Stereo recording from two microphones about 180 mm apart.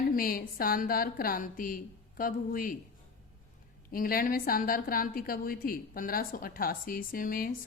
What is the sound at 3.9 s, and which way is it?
A woman's voice, 55° left (ahead or behind).